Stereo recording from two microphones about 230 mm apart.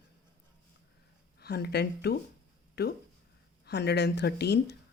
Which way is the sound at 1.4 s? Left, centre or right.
Left.